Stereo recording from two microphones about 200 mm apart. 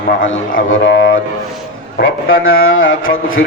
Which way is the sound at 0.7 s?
65° left (ahead or behind).